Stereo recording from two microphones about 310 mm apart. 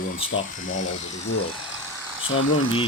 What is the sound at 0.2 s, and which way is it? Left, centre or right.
Speech, left.